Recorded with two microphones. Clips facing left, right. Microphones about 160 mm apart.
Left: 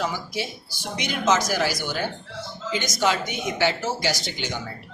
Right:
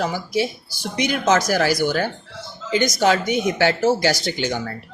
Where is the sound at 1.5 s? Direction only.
50° right (ahead or behind).